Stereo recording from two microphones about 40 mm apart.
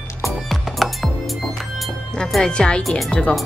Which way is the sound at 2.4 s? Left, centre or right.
Left.